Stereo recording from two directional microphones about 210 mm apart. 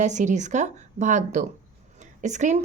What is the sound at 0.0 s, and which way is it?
A woman's voice, 35° right (ahead or behind).